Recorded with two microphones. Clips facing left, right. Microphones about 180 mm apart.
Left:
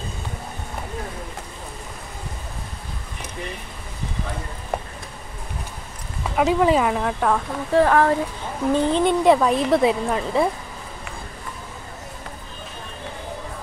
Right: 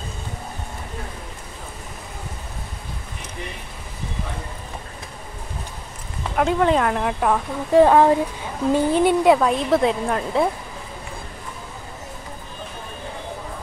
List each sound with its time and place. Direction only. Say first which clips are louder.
4.7 s insect: left 14 dB; 65° left (ahead or behind)
6.3 s a woman's voice: left 1 dB; 5° left (ahead or behind)
7.8 s speech: right 4 dB; 20° right (ahead or behind)
8.7 s a woman's voice: right 2 dB; 10° right (ahead or behind)